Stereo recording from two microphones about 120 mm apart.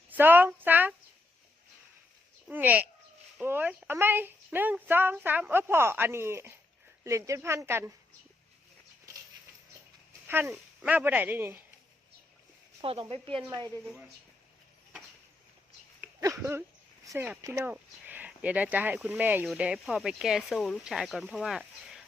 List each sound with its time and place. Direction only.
0.1 s a woman's voice: 15° right (ahead or behind)
2.5 s speech: 15° right (ahead or behind)
10.2 s speech: 20° right (ahead or behind)
12.8 s speech: 50° right (ahead or behind)
16.4 s speech: 20° right (ahead or behind); by 21.6 s 5° right (ahead or behind)